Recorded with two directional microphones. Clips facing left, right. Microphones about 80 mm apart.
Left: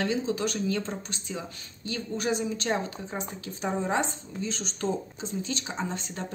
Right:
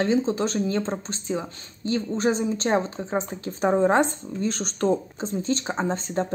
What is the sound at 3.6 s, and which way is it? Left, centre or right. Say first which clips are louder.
Speech: right 9 dB; right.